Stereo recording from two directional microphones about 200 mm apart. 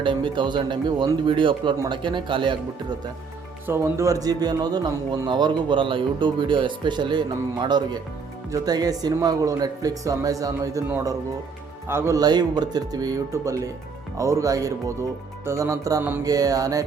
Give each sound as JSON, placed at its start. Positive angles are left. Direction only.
{"t": 0.0, "sound": "speech", "side_deg": -25}
{"t": 3.7, "sound": "speech", "side_deg": -15}